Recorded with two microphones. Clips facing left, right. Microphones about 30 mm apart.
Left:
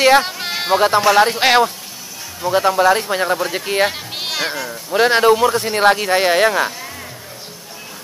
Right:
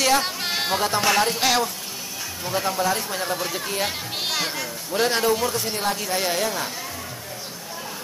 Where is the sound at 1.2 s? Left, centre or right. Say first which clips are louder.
Left 8 dB; left.